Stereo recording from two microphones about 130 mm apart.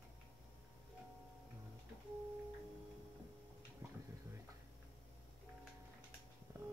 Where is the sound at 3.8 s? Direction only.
20° right (ahead or behind).